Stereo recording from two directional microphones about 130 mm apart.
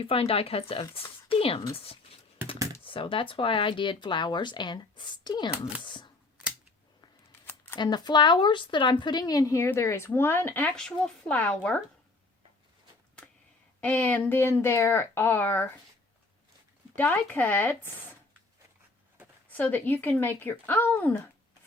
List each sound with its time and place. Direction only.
0.0 s speech: 45° left (ahead or behind)
5.5 s speech: 10° right (ahead or behind)
5.8 s a sound: 40° left (ahead or behind)
7.4 s a sound: 15° left (ahead or behind)
7.8 s speech: 35° left (ahead or behind); by 10.8 s 15° left (ahead or behind)
10.8 s speech: 5° left (ahead or behind)
13.8 s speech: 10° left (ahead or behind)
16.9 s speech: 10° left (ahead or behind)
19.5 s speech: 15° left (ahead or behind)